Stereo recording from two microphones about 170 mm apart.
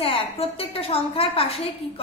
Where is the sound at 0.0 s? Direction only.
35° left (ahead or behind).